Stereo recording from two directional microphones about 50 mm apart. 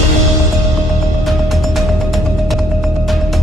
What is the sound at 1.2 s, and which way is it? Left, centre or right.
Music, centre.